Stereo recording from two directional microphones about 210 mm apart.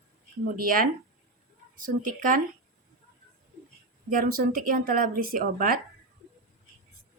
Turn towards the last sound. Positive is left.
turn(degrees=-45)  # may be behind; listen again after turning